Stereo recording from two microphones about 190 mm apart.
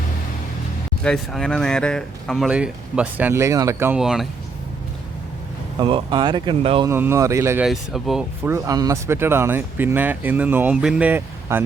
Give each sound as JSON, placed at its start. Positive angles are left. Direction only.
{"t": 1.0, "sound": "speech", "side_deg": 5}
{"t": 5.8, "sound": "speech", "side_deg": -25}
{"t": 6.8, "sound": "speech", "side_deg": -15}
{"t": 7.6, "sound": "speech", "side_deg": 0}
{"t": 8.4, "sound": "speech", "side_deg": -15}